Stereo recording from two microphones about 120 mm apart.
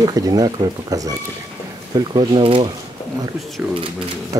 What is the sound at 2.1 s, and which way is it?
Speech, 40° right (ahead or behind).